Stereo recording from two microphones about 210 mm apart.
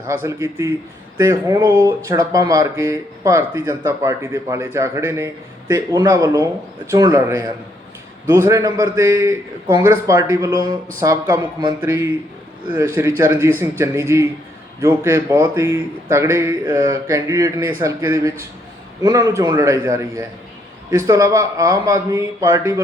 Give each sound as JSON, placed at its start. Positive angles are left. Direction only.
{"t": 0.1, "sound": "a man's voice", "side_deg": -15}
{"t": 12.7, "sound": "a man's voice", "side_deg": -15}